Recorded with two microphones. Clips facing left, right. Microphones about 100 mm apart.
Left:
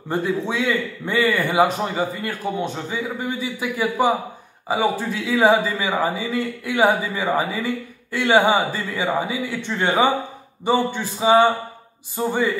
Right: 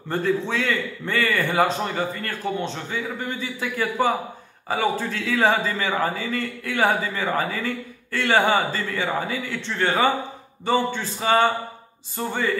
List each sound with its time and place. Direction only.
0.1 s a man's voice: 15° left (ahead or behind)